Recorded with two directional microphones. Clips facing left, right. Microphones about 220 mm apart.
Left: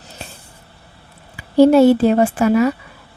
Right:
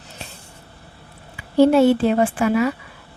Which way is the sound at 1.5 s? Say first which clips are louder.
Left 4 dB; 40° left (ahead or behind).